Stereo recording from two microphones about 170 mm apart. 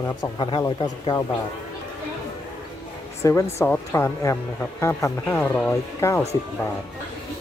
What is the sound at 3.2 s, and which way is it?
Speech, 15° left (ahead or behind).